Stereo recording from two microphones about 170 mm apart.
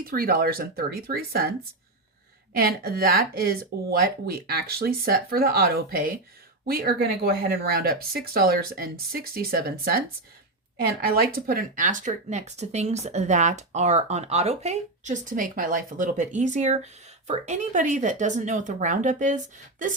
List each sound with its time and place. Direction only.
0.0 s speech: 60° right (ahead or behind)
11.0 s speech: 60° right (ahead or behind)